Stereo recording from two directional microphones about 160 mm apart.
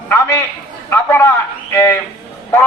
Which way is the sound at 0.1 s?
20° left (ahead or behind).